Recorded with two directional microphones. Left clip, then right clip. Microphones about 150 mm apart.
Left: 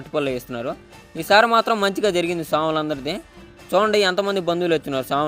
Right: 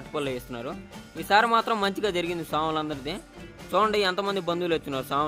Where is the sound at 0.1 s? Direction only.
35° left (ahead or behind).